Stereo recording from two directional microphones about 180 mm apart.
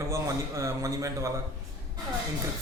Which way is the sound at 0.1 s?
15° right (ahead or behind).